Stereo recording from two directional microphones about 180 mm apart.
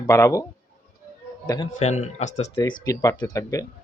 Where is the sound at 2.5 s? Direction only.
25° left (ahead or behind).